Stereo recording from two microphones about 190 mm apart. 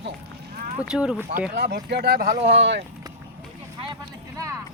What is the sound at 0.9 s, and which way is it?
Speech, 5° right (ahead or behind).